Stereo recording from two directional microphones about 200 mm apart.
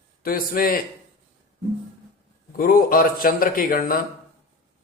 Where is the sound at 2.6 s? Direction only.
45° left (ahead or behind).